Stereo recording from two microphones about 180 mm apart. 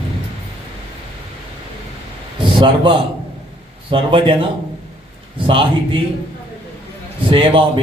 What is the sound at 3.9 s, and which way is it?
Speech, 30° right (ahead or behind).